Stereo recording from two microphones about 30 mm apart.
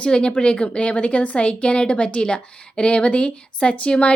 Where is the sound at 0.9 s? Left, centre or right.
Left.